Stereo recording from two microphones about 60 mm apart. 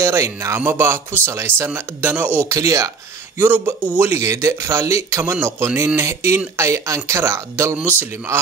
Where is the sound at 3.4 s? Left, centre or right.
Right.